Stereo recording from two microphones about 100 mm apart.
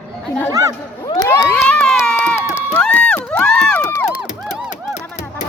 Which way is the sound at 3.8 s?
30° left (ahead or behind).